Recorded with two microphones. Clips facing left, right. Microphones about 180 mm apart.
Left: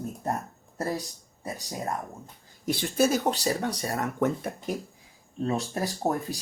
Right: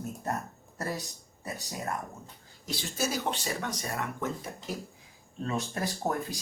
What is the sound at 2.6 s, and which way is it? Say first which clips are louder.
Speech: left 9 dB; 55° left (ahead or behind).